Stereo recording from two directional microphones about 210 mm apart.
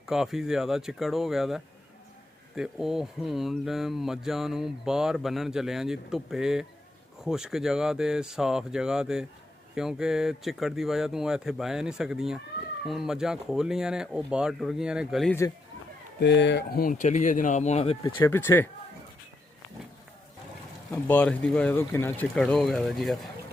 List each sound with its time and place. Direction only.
0.0 s speech: centre (ahead or behind)
16.2 s speech: 55° left (ahead or behind); by 18.1 s 30° left (ahead or behind)
18.2 s speech: 10° left (ahead or behind)
20.9 s speech: 5° left (ahead or behind)